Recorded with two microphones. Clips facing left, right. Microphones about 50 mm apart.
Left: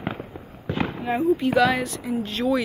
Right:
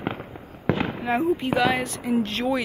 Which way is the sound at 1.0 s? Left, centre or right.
Right.